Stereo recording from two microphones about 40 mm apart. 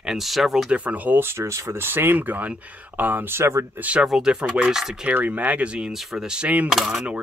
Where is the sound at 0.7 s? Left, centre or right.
Right.